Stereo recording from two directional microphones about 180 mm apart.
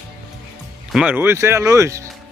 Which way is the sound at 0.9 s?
10° right (ahead or behind).